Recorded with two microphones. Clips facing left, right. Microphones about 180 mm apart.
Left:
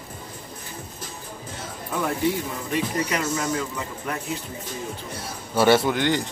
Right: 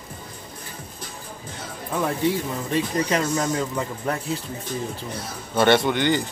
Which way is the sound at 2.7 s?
30° right (ahead or behind).